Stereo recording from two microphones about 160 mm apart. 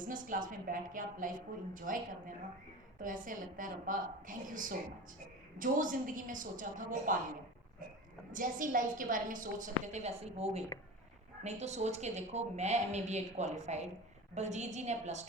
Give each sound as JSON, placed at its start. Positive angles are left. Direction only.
{"t": 0.0, "sound": "a woman's voice", "side_deg": -55}
{"t": 8.3, "sound": "a woman's voice", "side_deg": -55}